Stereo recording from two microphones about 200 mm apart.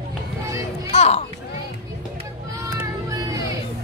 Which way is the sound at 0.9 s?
30° left (ahead or behind).